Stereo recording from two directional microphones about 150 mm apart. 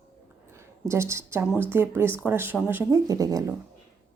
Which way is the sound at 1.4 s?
15° right (ahead or behind).